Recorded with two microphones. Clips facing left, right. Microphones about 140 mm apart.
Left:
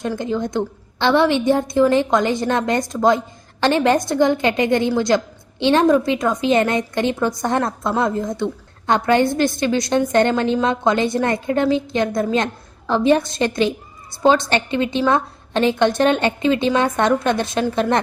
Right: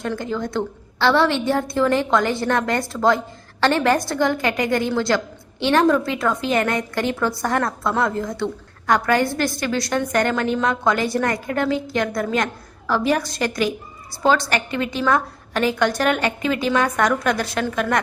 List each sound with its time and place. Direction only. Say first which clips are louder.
0.2 s a woman's voice: left 3 dB; 20° left (ahead or behind)